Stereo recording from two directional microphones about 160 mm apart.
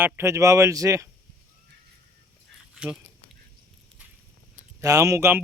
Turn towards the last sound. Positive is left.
turn(degrees=-15)  # may be behind; listen again after turning